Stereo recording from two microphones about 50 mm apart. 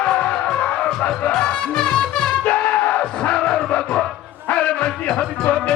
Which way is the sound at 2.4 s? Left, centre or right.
Left.